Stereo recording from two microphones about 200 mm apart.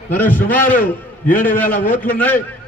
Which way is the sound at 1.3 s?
45° left (ahead or behind).